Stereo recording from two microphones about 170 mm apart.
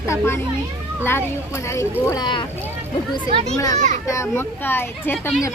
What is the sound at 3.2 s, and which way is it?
Speech, 30° right (ahead or behind).